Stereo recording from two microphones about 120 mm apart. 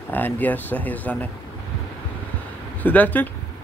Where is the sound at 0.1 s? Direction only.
15° left (ahead or behind).